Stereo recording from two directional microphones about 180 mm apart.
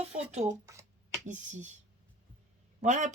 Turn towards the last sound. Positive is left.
turn(degrees=-40)  # may be behind; listen again after turning